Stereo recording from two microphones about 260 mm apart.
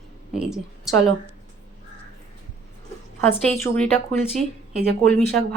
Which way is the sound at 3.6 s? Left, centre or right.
Centre.